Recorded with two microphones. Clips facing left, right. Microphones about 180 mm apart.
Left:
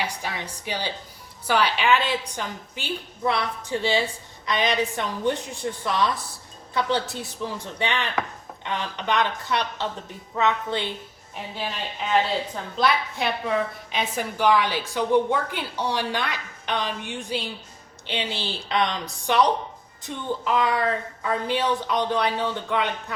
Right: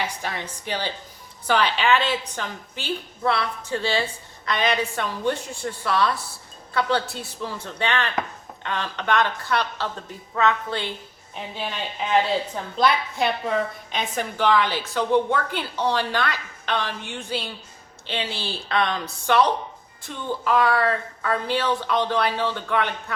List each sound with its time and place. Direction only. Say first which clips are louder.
0.0 s a woman's voice: right 1 dB; 10° left (ahead or behind)
12.7 s a woman's voice: right 2 dB; centre (ahead or behind); by 23.1 s 15° left (ahead or behind)